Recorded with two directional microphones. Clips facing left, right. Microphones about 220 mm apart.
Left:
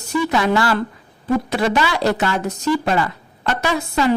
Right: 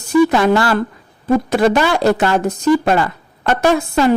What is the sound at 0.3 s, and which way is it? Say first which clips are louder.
Speech: right 4 dB; 50° right (ahead or behind).